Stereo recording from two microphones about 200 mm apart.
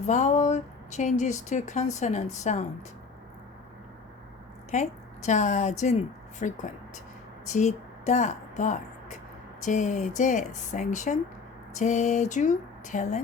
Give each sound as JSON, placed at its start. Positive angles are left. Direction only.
{"t": 0.0, "sound": "speech", "side_deg": 35}
{"t": 4.7, "sound": "a woman's voice", "side_deg": 35}